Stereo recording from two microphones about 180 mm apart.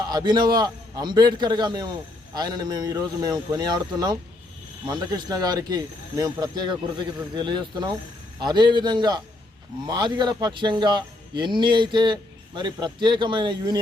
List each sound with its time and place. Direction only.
0.0 s a man's voice: 20° right (ahead or behind)